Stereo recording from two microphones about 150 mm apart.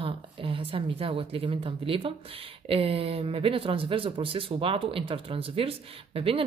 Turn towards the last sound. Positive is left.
turn(degrees=-40)  # may be behind; listen again after turning